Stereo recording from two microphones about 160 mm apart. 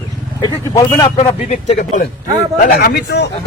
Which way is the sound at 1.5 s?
50° left (ahead or behind).